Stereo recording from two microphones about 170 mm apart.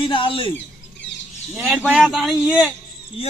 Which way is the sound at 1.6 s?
5° right (ahead or behind).